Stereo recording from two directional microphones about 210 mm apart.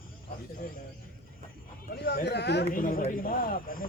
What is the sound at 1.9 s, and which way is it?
Speech, 45° left (ahead or behind).